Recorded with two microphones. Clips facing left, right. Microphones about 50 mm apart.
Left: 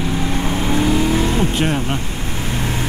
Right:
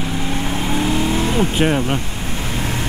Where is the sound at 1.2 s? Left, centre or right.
Right.